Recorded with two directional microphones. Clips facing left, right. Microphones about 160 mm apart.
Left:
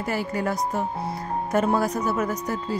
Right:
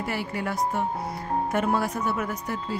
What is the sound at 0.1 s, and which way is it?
Speech, 40° left (ahead or behind).